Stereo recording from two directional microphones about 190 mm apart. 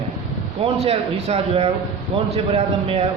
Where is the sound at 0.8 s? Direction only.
30° right (ahead or behind).